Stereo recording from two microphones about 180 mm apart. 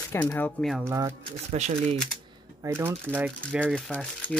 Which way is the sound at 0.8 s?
15° right (ahead or behind).